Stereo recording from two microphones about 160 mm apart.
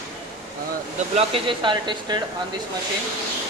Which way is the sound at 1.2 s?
35° right (ahead or behind).